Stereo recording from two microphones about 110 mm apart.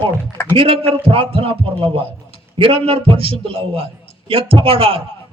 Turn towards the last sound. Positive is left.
turn(degrees=-55)  # may be behind; listen again after turning